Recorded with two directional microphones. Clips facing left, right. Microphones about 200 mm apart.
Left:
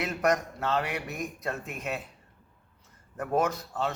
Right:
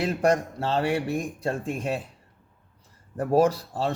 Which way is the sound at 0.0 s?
30° right (ahead or behind).